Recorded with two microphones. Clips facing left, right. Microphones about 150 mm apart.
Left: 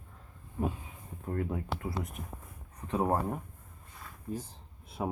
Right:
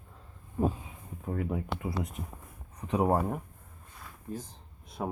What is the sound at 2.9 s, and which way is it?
Speech, 15° right (ahead or behind).